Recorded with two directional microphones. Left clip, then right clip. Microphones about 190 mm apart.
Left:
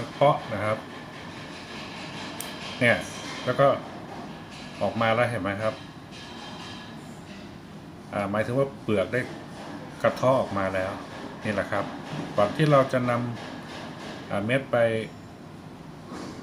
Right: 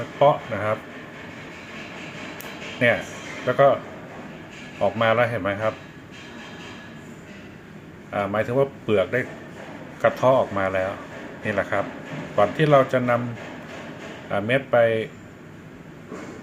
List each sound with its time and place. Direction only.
0.2 s speech: 15° right (ahead or behind)
2.8 s speech: 15° right (ahead or behind)
4.9 s speech: 15° right (ahead or behind)
8.1 s speech: 15° right (ahead or behind)
14.3 s speech: 15° right (ahead or behind)